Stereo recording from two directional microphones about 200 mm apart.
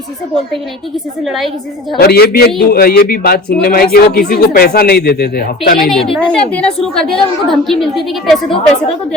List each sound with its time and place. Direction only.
1.2 s a woman's voice: centre (ahead or behind)
2.0 s speech: 50° left (ahead or behind)
5.9 s a woman's voice: centre (ahead or behind)